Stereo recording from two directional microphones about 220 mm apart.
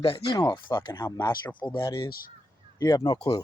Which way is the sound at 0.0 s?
25° left (ahead or behind).